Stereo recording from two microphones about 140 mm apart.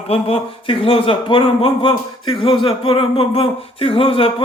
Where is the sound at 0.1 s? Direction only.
45° left (ahead or behind).